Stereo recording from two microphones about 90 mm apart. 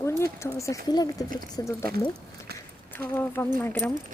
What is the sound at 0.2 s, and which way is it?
Speech, 30° left (ahead or behind).